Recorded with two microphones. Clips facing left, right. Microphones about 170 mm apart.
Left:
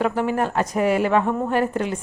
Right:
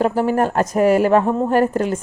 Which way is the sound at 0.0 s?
35° right (ahead or behind).